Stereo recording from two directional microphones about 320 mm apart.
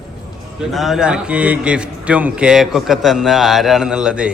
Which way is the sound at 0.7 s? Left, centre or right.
Centre.